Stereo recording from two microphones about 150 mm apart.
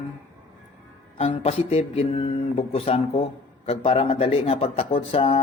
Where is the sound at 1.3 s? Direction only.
40° left (ahead or behind).